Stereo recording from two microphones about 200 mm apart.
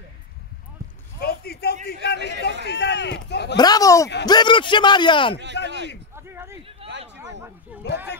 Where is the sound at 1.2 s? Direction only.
50° left (ahead or behind).